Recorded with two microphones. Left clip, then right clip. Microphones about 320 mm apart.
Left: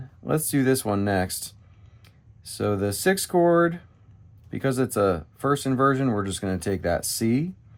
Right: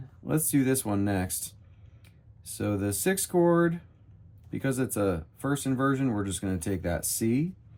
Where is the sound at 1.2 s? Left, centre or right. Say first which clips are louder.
Left 4 dB; centre.